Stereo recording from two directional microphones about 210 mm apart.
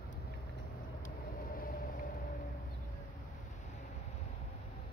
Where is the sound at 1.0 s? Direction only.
45° left (ahead or behind).